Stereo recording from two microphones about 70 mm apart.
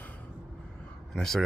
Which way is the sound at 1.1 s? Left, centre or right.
Centre.